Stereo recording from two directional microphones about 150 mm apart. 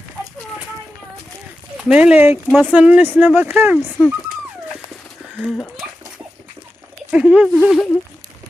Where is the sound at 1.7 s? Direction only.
5° right (ahead or behind).